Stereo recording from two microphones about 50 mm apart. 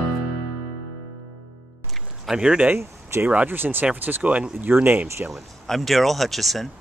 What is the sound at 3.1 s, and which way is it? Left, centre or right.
Speech, right.